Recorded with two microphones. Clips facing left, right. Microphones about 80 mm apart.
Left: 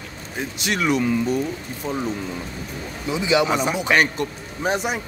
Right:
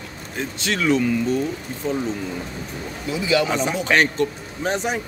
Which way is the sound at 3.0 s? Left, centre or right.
Left.